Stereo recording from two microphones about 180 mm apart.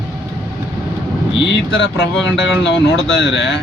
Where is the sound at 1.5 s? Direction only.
80° left.